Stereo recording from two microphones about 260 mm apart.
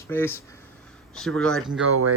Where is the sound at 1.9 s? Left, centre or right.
Right.